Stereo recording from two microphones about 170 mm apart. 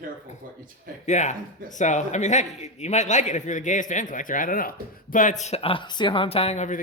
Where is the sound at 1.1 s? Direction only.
45° left (ahead or behind).